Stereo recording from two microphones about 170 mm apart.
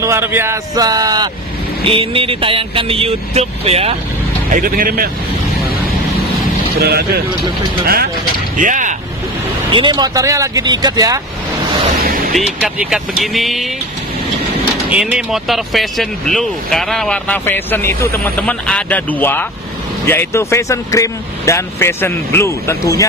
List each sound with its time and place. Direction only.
0.0 s speech: 15° right (ahead or behind)
1.9 s speech: 30° right (ahead or behind)
4.5 s speech: 55° right (ahead or behind)
6.8 s speech: 65° right (ahead or behind)
8.5 s vehicle: 50° right (ahead or behind)
9.7 s speech: 30° right (ahead or behind)
12.0 s speech: 55° right (ahead or behind)
12.4 s speech: 5° right (ahead or behind)
14.9 s speech: 5° right (ahead or behind); by 23.0 s 15° left (ahead or behind)